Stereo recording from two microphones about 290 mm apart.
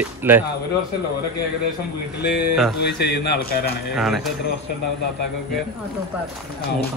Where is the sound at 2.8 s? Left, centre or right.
Left.